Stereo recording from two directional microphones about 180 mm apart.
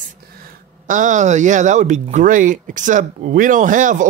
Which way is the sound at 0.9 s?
45° right (ahead or behind).